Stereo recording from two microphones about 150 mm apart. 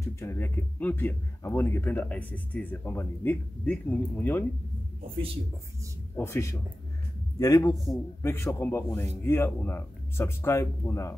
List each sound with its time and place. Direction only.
0.0 s speech: 15° left (ahead or behind)
6.1 s a man's voice: 15° left (ahead or behind)